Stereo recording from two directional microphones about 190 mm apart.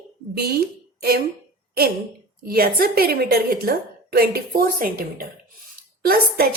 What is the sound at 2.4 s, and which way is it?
A woman's voice, 50° right (ahead or behind).